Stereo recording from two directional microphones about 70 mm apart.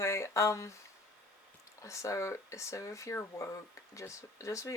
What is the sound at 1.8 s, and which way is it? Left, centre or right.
Speech, left.